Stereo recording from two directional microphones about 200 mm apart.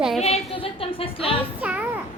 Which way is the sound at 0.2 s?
30° left (ahead or behind).